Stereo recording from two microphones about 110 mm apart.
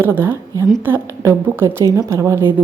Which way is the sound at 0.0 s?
20° right (ahead or behind).